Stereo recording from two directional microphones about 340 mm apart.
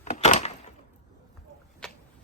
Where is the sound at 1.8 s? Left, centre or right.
Centre.